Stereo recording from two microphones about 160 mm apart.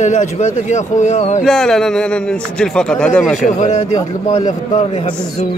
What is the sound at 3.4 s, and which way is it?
Speech, 45° left (ahead or behind).